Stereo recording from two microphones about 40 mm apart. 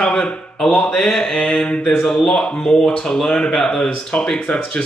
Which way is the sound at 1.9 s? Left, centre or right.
Centre.